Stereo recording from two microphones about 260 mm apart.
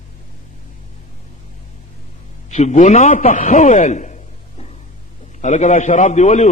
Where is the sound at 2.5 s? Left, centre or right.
Left.